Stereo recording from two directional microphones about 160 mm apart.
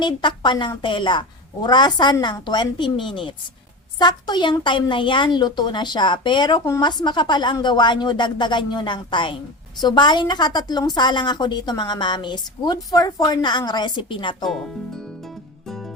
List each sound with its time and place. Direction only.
0.0 s a woman's voice: 30° left (ahead or behind)
3.9 s a woman's voice: 25° left (ahead or behind)